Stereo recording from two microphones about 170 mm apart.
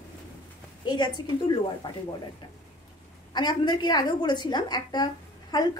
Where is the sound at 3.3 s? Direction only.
25° left (ahead or behind).